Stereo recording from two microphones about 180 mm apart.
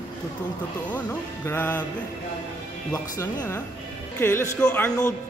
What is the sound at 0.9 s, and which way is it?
Speech, 10° left (ahead or behind).